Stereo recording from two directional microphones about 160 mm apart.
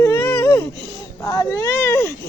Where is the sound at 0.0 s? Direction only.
15° left (ahead or behind).